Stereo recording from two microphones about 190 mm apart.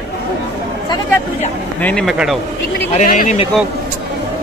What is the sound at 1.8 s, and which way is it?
Speech, 5° left (ahead or behind).